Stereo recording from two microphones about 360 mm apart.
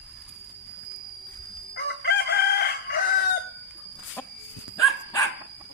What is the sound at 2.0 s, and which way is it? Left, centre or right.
Chicken, left.